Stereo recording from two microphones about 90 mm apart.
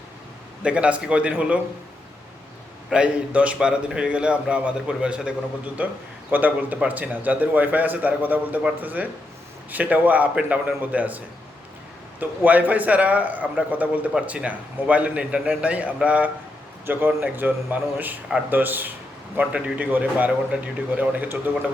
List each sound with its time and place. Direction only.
0.6 s a man's voice: 15° right (ahead or behind)
2.9 s a man's voice: 15° right (ahead or behind)
12.2 s a man's voice: 20° right (ahead or behind)